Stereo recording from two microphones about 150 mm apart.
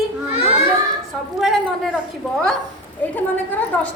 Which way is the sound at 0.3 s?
40° left (ahead or behind).